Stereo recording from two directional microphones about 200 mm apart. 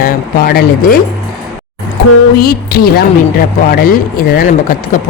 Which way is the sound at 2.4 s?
50° left (ahead or behind).